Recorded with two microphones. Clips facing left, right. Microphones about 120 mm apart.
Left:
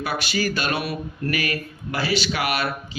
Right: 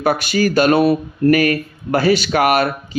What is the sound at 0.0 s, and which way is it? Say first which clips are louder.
Speech: right 8 dB; 50° right (ahead or behind).